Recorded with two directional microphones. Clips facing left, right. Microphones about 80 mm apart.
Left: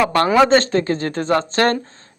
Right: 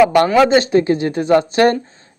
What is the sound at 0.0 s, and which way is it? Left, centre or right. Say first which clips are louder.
Speech: right 3 dB; centre.